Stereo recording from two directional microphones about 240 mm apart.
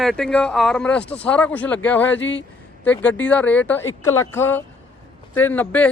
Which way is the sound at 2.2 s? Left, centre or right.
Left.